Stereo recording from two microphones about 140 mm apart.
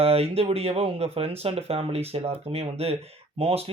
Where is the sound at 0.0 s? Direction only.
45° right (ahead or behind).